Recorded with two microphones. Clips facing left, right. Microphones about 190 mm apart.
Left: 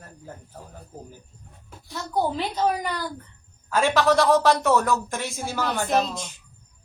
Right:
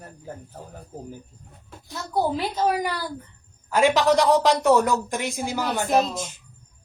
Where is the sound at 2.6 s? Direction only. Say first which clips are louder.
Right 1 dB; 10° right (ahead or behind).